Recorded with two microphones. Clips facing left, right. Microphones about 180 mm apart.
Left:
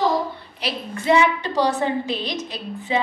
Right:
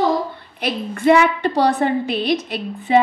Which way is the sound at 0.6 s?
55° right (ahead or behind).